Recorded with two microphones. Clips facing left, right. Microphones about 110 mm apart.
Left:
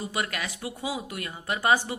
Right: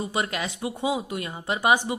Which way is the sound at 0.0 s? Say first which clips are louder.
Right 3 dB; 25° right (ahead or behind).